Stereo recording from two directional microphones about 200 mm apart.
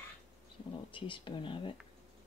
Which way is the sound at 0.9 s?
25° left (ahead or behind).